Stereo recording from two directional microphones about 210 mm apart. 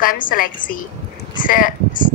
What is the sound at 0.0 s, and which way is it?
A woman's voice, 40° left (ahead or behind).